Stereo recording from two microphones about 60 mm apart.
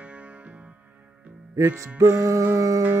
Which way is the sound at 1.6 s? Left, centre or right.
Right.